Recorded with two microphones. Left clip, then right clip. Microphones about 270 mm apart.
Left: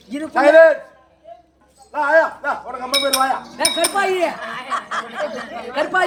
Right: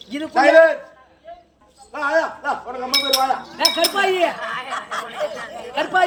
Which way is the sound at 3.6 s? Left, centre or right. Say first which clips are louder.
Right 1 dB; centre.